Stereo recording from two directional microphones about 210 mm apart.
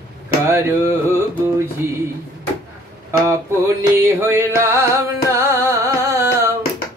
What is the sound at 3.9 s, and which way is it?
Music, 10° right (ahead or behind).